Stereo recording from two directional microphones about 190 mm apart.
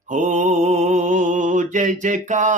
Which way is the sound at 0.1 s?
40° right (ahead or behind).